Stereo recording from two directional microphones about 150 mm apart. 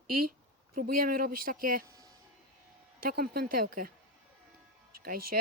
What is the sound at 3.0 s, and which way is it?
Speech, 85° right.